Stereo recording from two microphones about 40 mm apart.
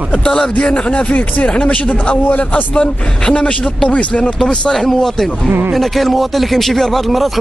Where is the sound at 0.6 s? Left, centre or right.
Left.